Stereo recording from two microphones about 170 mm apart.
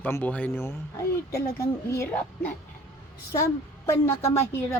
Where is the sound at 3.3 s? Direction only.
15° left (ahead or behind).